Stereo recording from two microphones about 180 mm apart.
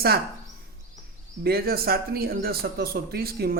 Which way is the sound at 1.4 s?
60° right (ahead or behind).